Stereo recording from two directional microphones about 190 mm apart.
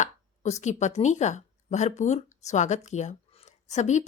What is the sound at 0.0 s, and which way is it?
A woman's voice, 35° left (ahead or behind).